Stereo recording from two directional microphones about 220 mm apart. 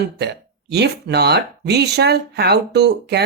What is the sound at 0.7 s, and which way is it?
Speech, 50° right (ahead or behind).